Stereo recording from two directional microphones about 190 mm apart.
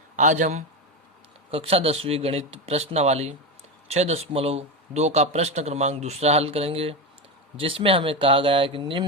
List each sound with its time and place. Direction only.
0.2 s speech: 40° right (ahead or behind)